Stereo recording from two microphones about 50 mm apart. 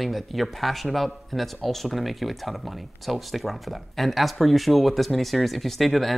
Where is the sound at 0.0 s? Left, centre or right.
Centre.